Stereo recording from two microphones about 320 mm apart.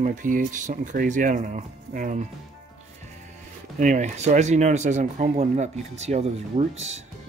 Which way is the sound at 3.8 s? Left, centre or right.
Right.